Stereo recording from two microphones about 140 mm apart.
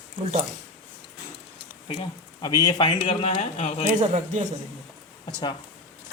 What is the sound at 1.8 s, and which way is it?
Speech, 35° left (ahead or behind).